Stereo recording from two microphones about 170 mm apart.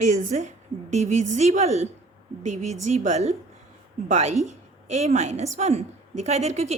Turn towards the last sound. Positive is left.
turn(degrees=-40)  # may be behind; listen again after turning